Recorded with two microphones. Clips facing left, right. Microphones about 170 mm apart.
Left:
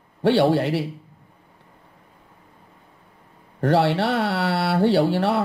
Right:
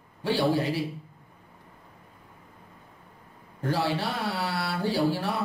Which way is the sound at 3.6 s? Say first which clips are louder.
Left 8 dB; 70° left (ahead or behind).